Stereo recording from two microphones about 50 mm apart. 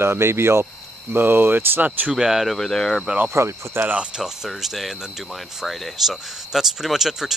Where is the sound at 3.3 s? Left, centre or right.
Right.